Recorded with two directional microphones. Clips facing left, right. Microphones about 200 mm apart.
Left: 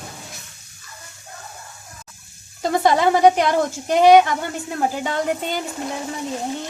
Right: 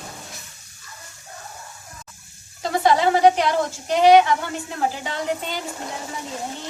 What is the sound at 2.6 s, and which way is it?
A woman's voice, 50° left (ahead or behind).